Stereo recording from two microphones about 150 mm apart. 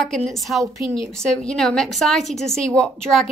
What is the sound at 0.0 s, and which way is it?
Speech, 5° left (ahead or behind).